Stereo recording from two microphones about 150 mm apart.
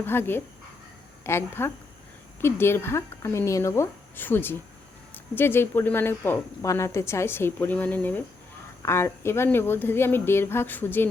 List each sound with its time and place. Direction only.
0.0 s speech: 15° left (ahead or behind)